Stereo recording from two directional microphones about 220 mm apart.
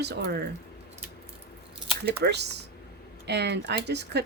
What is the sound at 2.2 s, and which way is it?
Speech, 50° right (ahead or behind).